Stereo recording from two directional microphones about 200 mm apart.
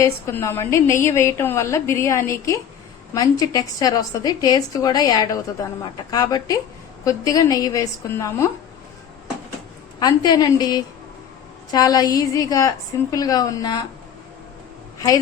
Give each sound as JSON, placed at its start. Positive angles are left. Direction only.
{"t": 0.0, "sound": "a woman's voice", "side_deg": 15}
{"t": 10.0, "sound": "a woman's voice", "side_deg": 20}
{"t": 14.9, "sound": "a woman's voice", "side_deg": 15}